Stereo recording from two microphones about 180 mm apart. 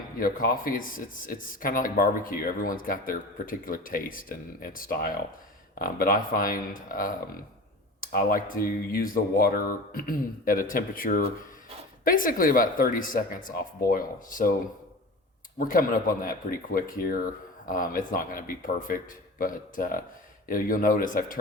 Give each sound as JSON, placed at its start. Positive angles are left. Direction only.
{"t": 0.2, "sound": "speech", "side_deg": 50}
{"t": 15.5, "sound": "speech", "side_deg": 50}